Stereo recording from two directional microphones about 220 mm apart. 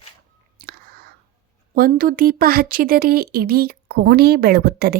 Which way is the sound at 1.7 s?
40° right (ahead or behind).